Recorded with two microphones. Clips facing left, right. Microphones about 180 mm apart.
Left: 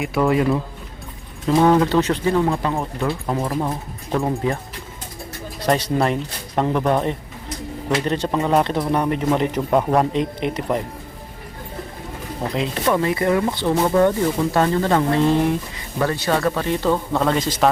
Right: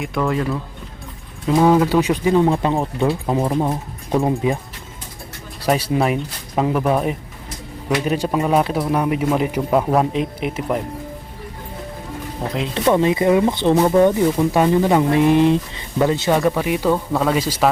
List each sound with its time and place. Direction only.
0.2 s speech: 10° left (ahead or behind)
1.5 s speech: 5° right (ahead or behind)
5.6 s a man's voice: 5° right (ahead or behind)
12.7 s speech: 20° right (ahead or behind)